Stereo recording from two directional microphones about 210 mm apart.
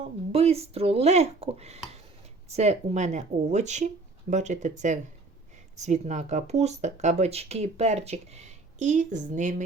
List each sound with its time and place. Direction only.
0.0 s speech: 30° right (ahead or behind)
5.8 s speech: 35° right (ahead or behind)